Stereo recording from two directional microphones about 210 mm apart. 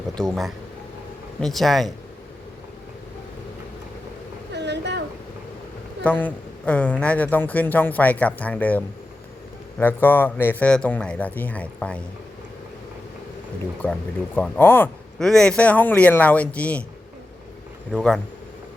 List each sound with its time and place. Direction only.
0.2 s speech: centre (ahead or behind)
4.5 s a sound: 55° right (ahead or behind)
6.0 s speech: 5° left (ahead or behind)
13.8 s speech: 10° left (ahead or behind)